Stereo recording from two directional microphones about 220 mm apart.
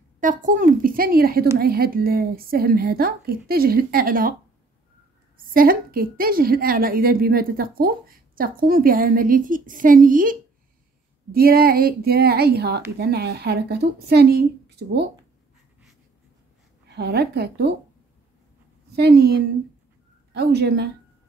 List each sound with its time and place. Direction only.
0.2 s a woman's voice: 35° right (ahead or behind)
5.5 s a woman's voice: 40° right (ahead or behind)
11.3 s a woman's voice: 45° right (ahead or behind)
16.9 s a woman's voice: 50° right (ahead or behind)
18.9 s a woman's voice: 50° right (ahead or behind)